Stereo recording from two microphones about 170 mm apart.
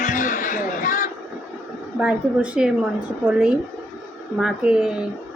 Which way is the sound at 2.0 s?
5° right (ahead or behind).